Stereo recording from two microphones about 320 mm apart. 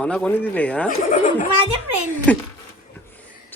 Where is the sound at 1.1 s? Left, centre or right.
Left.